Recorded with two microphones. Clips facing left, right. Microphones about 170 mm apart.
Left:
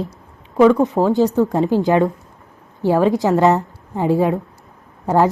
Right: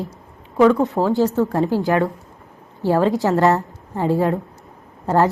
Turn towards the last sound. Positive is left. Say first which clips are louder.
# left 2 dB
turn(degrees=15)  # may be behind; listen again after turning